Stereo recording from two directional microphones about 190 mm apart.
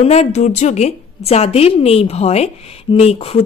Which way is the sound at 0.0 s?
35° left (ahead or behind).